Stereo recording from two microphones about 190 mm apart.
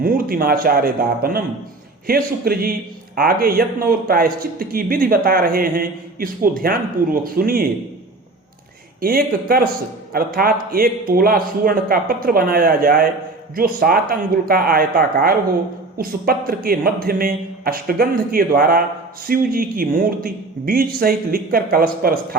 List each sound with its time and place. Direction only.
0.0 s a man's voice: 50° right (ahead or behind)
9.0 s a man's voice: 50° right (ahead or behind)